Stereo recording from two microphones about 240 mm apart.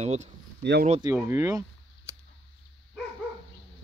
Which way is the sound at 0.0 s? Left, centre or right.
Right.